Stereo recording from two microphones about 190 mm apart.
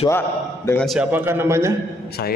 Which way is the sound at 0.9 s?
10° right (ahead or behind).